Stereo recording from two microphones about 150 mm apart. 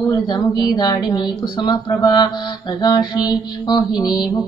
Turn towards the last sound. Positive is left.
turn(degrees=25)  # may be behind; listen again after turning